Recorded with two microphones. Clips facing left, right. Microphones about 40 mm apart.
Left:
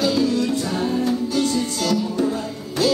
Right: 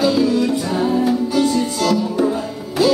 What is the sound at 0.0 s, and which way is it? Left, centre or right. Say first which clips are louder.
Music: right 4 dB; centre.